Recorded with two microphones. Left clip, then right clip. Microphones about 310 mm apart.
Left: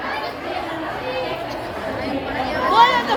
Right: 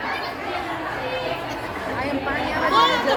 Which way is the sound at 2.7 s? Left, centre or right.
Centre.